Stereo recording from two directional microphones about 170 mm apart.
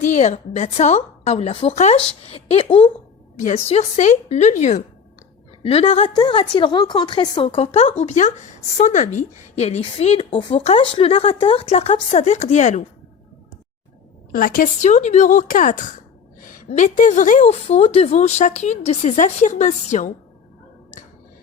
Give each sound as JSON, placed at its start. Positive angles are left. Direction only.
{"t": 0.0, "sound": "a woman's voice", "side_deg": 45}
{"t": 3.3, "sound": "a woman's voice", "side_deg": 45}
{"t": 14.3, "sound": "a woman's voice", "side_deg": 55}